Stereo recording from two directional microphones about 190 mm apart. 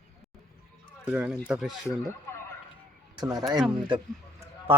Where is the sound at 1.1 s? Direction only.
5° right (ahead or behind).